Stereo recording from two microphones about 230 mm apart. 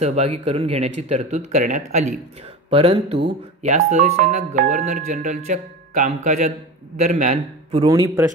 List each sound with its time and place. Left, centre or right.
0.0 s speech: right
7.8 s a man's voice: centre